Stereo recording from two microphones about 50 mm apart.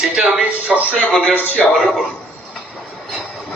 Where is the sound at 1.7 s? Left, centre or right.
Centre.